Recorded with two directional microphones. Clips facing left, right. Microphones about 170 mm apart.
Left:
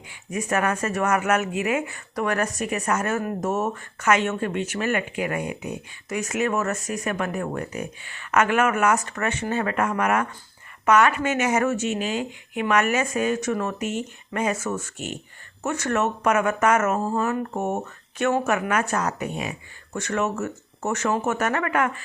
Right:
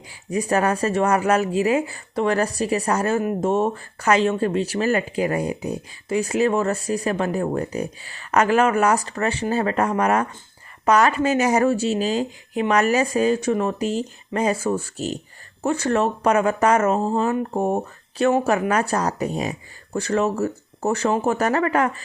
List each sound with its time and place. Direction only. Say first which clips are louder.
0.1 s speech: right 4 dB; 35° right (ahead or behind)